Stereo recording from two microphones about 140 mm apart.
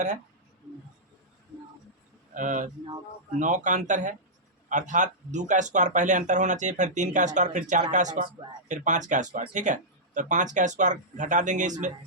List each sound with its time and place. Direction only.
2.3 s speech: 65° right (ahead or behind)